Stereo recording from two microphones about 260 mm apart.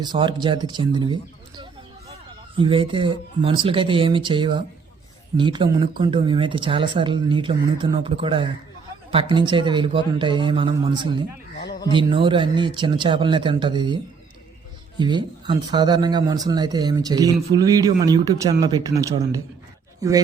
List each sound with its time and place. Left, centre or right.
0.0 s speech: centre
11.6 s a sound: left
11.9 s speech: centre